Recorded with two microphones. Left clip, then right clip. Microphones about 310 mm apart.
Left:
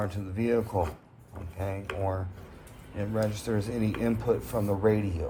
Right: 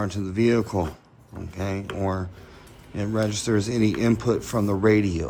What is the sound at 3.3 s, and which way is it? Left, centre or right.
Speech, right.